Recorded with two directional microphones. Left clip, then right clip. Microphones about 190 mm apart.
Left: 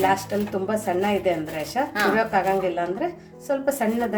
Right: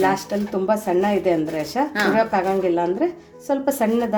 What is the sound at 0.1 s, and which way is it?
A woman's voice, 20° right (ahead or behind).